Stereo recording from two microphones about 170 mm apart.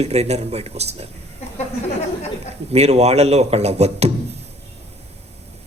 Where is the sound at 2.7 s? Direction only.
40° right (ahead or behind).